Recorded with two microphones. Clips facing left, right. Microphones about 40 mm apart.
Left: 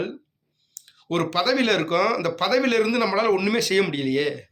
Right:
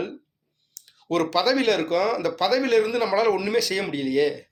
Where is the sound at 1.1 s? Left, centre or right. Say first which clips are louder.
Right 1 dB; left.